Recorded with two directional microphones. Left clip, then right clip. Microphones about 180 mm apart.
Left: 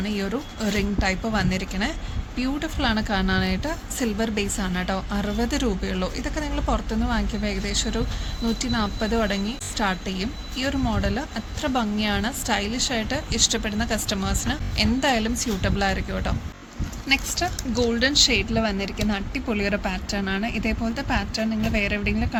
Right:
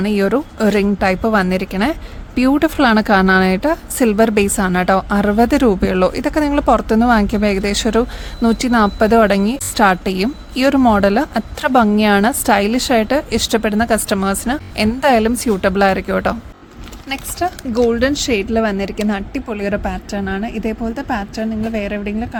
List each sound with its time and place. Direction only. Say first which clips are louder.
0.0 s speech: right 12 dB; 65° right (ahead or behind)
17.1 s speech: right 3 dB; 40° right (ahead or behind)